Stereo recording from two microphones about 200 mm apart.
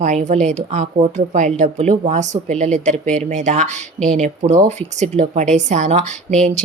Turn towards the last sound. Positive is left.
turn(degrees=-35)  # may be behind; listen again after turning